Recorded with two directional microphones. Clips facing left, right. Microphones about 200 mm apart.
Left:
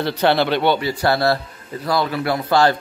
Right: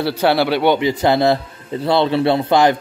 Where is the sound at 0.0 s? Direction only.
10° right (ahead or behind).